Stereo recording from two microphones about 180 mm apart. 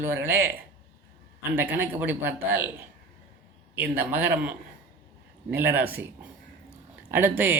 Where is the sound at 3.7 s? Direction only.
10° right (ahead or behind).